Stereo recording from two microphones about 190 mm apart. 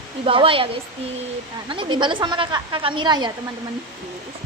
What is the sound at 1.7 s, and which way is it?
A woman's voice, 25° right (ahead or behind).